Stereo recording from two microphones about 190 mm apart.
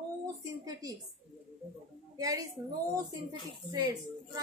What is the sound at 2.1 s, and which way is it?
A woman's voice, 20° right (ahead or behind).